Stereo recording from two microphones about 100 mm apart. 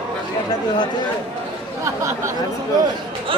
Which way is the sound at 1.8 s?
30° right (ahead or behind).